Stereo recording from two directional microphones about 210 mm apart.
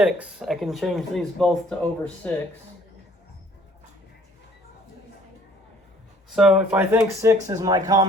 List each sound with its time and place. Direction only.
0.0 s speech: 5° right (ahead or behind)
6.3 s speech: 5° right (ahead or behind); by 8.0 s 20° right (ahead or behind)